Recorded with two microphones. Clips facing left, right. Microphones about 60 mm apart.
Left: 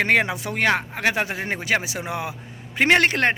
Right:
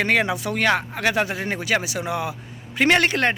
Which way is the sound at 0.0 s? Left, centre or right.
Left.